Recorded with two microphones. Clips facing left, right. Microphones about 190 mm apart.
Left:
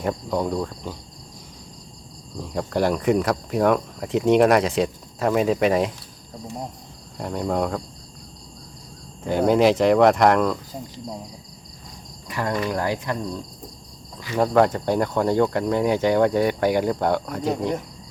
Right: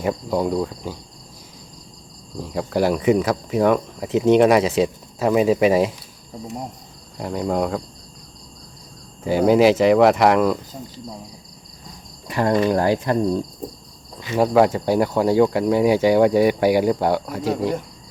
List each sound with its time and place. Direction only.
0.0 s speech: 5° right (ahead or behind)
2.4 s speech: 5° right (ahead or behind)
7.2 s speech: centre (ahead or behind)
9.2 s speech: 5° right (ahead or behind)
12.3 s speech: 30° right (ahead or behind)
14.3 s speech: 5° right (ahead or behind)